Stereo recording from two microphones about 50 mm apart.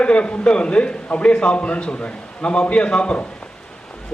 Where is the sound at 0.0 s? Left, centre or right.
Left.